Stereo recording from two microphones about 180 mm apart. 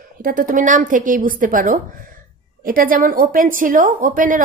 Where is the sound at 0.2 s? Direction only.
50° right (ahead or behind).